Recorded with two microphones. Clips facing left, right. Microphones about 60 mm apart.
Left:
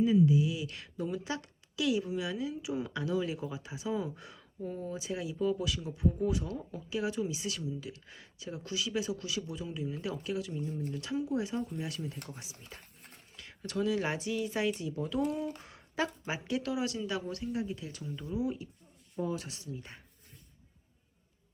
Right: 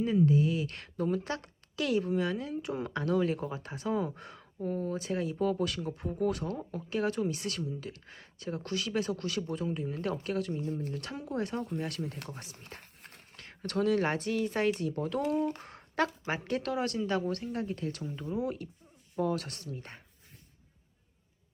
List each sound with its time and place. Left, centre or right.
0.0 s speech: right
13.4 s speech: right